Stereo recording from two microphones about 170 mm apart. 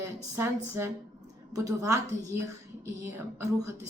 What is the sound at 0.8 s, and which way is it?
A woman's voice, 15° right (ahead or behind).